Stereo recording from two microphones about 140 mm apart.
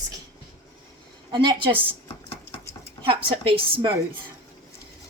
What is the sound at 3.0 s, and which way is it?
Speech, 40° right (ahead or behind).